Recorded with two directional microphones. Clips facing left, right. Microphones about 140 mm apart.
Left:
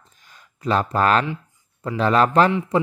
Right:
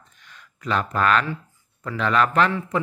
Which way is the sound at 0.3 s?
35° left (ahead or behind).